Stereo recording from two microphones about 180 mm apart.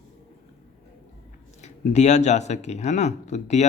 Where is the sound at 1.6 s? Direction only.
40° left (ahead or behind).